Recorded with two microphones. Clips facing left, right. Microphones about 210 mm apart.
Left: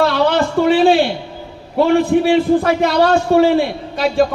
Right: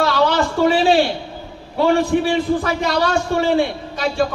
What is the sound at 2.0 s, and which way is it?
A man's voice, 55° left (ahead or behind).